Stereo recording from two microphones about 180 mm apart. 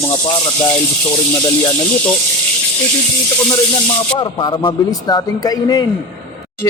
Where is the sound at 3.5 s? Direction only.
25° left (ahead or behind).